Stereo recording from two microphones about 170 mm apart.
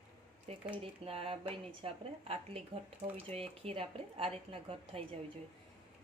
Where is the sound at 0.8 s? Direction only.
35° right (ahead or behind).